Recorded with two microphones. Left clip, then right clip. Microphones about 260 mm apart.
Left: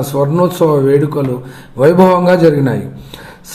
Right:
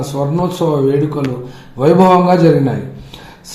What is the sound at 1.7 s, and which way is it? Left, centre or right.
Speech, left.